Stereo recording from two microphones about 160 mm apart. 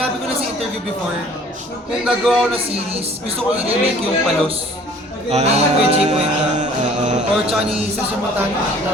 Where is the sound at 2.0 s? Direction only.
Centre (ahead or behind).